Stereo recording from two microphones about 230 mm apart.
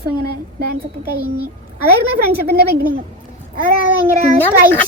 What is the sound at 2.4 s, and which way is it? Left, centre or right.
Speech, right.